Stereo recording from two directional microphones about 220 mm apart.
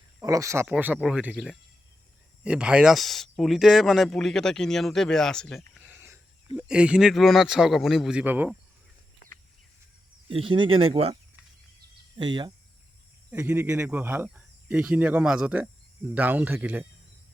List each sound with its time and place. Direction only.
0.2 s speech: 15° right (ahead or behind)
10.2 s speech: 25° right (ahead or behind)
13.3 s speech: 10° right (ahead or behind)